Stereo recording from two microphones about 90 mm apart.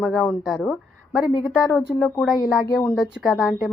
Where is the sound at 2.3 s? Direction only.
45° left (ahead or behind).